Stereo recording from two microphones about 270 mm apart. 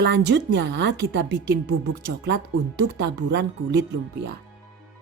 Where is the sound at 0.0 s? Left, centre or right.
Right.